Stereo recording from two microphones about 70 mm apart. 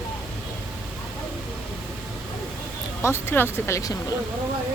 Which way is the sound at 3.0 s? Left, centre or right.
Left.